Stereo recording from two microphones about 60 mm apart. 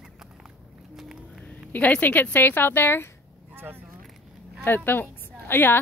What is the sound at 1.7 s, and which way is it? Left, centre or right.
Speech, left.